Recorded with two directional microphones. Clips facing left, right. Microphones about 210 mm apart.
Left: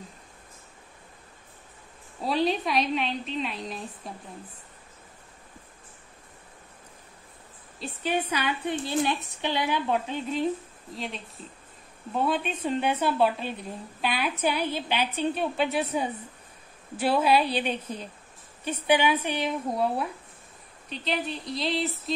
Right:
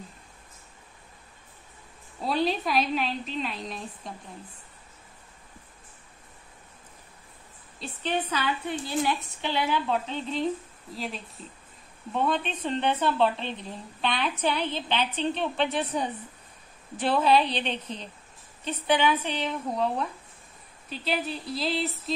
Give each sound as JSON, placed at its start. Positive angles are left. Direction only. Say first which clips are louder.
{"t": 2.2, "sound": "a woman's voice", "louder": "left 1 dB", "side_deg": 0}
{"t": 7.8, "sound": "speech", "louder": "left 1 dB", "side_deg": 10}
{"t": 11.0, "sound": "a woman's voice", "louder": "right 1 dB", "side_deg": 0}
{"t": 20.9, "sound": "a woman's voice", "louder": "even", "side_deg": -5}